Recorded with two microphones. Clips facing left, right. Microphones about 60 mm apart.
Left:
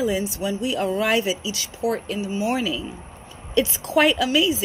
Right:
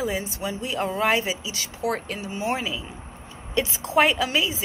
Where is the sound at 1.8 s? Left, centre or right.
Right.